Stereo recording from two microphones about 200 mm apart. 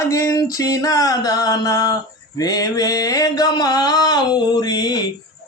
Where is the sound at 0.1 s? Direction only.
15° left (ahead or behind).